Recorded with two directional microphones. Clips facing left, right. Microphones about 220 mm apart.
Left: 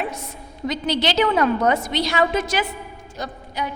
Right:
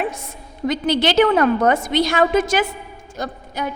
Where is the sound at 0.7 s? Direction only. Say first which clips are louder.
Right 4 dB; 50° right (ahead or behind).